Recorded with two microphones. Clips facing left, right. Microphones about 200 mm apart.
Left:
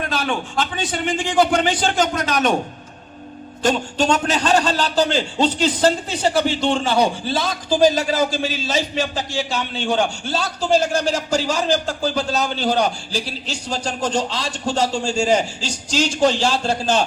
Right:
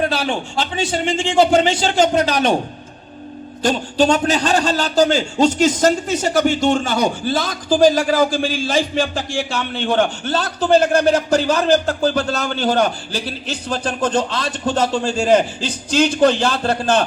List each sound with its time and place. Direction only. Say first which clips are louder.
0.0 s a man's voice: right 3 dB; 30° right (ahead or behind)
3.6 s a man's voice: right 3 dB; 40° right (ahead or behind); by 17.1 s 60° right (ahead or behind)